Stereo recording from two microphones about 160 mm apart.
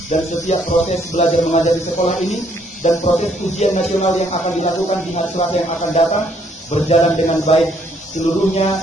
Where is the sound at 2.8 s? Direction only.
50° left (ahead or behind).